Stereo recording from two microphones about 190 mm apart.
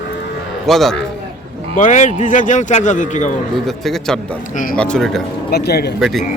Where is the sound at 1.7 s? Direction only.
40° left (ahead or behind).